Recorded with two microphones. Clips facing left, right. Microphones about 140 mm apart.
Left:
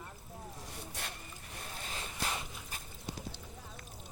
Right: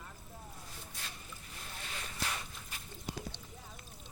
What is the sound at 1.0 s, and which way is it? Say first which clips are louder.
Vehicle: left 5 dB; 70° left (ahead or behind).